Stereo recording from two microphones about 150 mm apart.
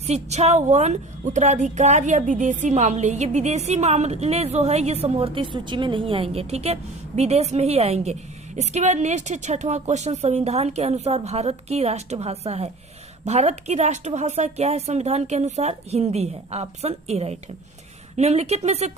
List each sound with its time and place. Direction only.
0.1 s a woman's voice: 45° right (ahead or behind)